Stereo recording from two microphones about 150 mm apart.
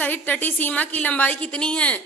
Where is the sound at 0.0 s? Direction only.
10° left (ahead or behind).